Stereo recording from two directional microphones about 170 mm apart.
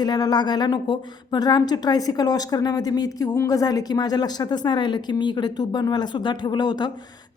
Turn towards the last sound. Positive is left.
turn(degrees=25)  # may be behind; listen again after turning